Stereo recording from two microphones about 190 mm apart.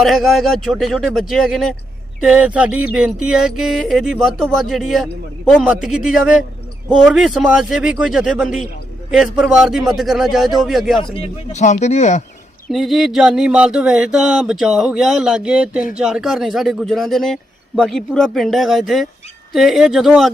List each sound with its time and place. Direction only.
0.0 s a man's voice: centre (ahead or behind)
11.0 s speech: 35° left (ahead or behind)
12.7 s a man's voice: centre (ahead or behind)